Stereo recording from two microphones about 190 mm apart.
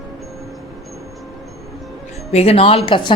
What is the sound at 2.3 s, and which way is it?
Speech, 30° left (ahead or behind).